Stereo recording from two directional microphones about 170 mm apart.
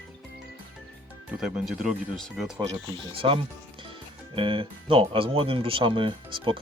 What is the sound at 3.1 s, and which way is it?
Speech, 30° right (ahead or behind).